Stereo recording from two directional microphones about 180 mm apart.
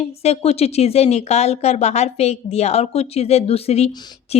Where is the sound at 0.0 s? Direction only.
35° left (ahead or behind).